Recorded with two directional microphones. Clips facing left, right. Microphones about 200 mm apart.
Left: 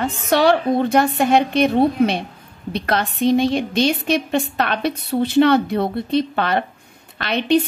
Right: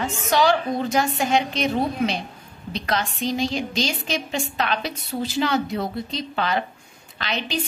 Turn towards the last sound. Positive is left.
turn(degrees=60)  # may be behind; listen again after turning